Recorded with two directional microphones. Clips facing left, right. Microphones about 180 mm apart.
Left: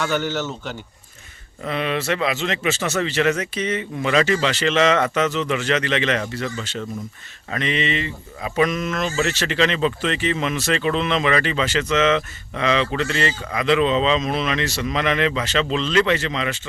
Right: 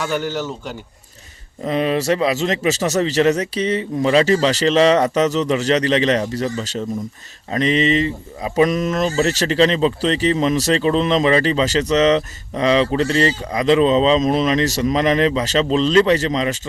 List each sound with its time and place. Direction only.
0.0 s speech: 10° right (ahead or behind)
1.6 s speech: 35° right (ahead or behind)